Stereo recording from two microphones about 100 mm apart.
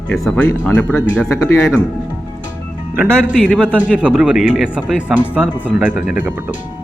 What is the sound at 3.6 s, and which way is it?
Speech, 15° right (ahead or behind).